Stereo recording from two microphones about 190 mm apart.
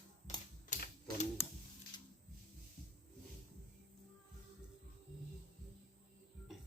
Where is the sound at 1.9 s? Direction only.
20° left (ahead or behind).